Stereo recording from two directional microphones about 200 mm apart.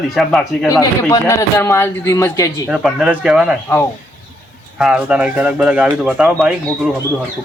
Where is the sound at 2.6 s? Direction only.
5° right (ahead or behind).